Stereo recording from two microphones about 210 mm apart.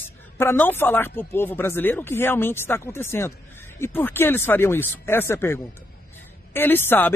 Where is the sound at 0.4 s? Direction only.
10° left (ahead or behind).